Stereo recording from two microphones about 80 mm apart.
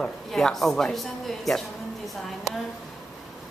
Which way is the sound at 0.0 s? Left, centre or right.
Centre.